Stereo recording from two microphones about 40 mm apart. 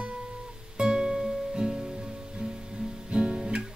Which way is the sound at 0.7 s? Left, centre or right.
Centre.